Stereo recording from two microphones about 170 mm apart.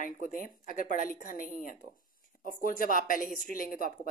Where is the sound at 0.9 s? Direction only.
55° left (ahead or behind).